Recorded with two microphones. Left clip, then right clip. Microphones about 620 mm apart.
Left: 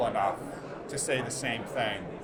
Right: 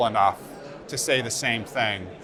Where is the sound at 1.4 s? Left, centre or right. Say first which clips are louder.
Right 5 dB; right.